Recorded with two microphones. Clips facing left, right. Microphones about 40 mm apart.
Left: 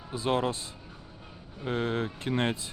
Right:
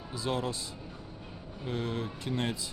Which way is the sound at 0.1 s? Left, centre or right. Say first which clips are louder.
Left 5 dB; left.